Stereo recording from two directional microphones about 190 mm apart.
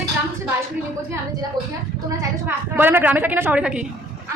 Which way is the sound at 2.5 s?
10° right (ahead or behind).